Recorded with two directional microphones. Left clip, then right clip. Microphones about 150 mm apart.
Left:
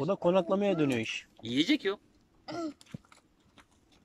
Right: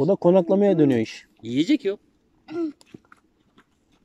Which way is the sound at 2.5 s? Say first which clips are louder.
Right 8 dB; 40° left (ahead or behind).